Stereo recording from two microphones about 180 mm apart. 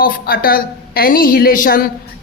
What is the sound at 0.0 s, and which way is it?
A woman's voice, 55° left (ahead or behind).